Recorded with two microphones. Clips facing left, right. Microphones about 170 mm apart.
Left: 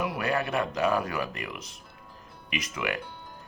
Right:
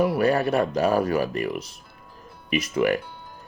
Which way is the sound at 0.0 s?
35° right (ahead or behind).